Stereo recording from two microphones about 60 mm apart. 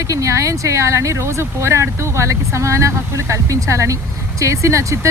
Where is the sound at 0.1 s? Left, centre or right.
Right.